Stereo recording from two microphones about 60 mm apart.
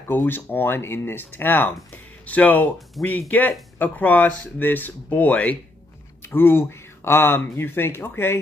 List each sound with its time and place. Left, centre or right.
0.1 s speech: left
2.2 s speech: left
6.3 s speech: left